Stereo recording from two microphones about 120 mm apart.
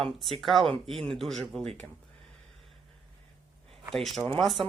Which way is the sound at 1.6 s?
55° right (ahead or behind).